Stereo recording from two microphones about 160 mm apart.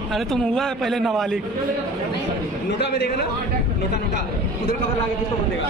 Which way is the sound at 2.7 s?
90° left.